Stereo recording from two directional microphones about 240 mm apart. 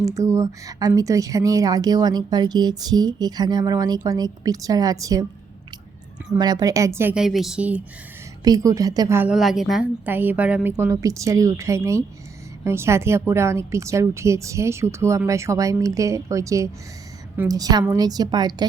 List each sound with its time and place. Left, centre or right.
0.0 s a woman's voice: centre
6.3 s a woman's voice: centre